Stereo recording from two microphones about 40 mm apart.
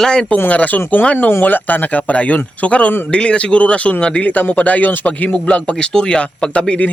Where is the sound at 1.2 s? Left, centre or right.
Left.